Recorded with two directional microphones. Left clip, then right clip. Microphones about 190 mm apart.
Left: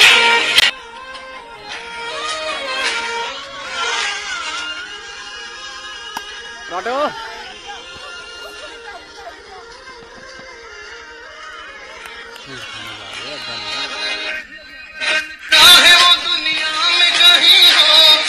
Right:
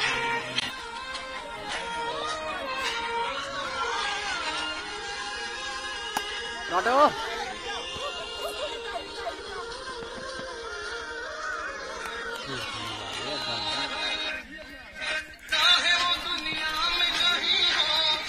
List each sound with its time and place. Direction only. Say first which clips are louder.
0.0 s music: left 18 dB; 45° left (ahead or behind)
1.7 s music: left 5 dB; 15° left (ahead or behind)
3.5 s a sound: left 12 dB; 20° left (ahead or behind)
4.1 s music: left 7 dB; 5° right (ahead or behind)
13.1 s music: left 5 dB; 5° left (ahead or behind)
13.7 s music: left 7 dB; 30° left (ahead or behind)